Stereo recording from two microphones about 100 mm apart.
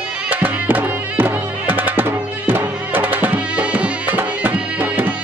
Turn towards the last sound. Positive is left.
turn(degrees=-20)  # may be behind; listen again after turning